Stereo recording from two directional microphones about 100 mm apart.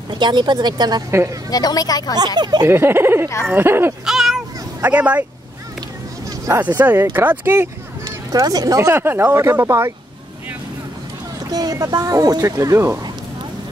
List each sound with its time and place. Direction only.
0.1 s speech: 50° right (ahead or behind)
1.5 s speech: 40° left (ahead or behind)
2.1 s speech: 45° right (ahead or behind)
2.7 s speech: 20° right (ahead or behind)
4.0 s a sound: 5° right (ahead or behind)
4.8 s speech: 15° right (ahead or behind)
6.6 s speech: 15° right (ahead or behind)
8.0 s speech: 40° right (ahead or behind)
8.8 s speech: 25° right (ahead or behind)
11.5 s speech: 40° right (ahead or behind)